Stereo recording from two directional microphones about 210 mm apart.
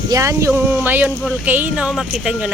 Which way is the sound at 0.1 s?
15° right (ahead or behind).